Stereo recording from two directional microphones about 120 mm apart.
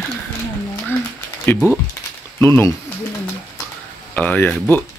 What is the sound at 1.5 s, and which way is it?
Speech, 15° left (ahead or behind).